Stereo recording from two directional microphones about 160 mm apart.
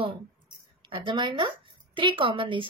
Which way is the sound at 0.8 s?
30° right (ahead or behind).